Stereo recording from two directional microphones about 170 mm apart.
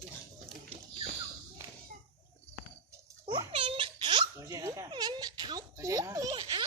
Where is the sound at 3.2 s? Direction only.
30° right (ahead or behind).